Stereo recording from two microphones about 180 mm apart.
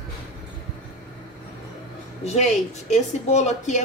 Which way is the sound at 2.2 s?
40° left (ahead or behind).